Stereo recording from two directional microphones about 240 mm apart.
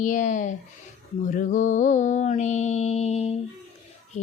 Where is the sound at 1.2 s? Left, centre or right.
Left.